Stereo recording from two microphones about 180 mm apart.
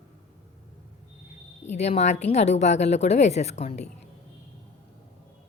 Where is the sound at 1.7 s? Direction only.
40° left (ahead or behind).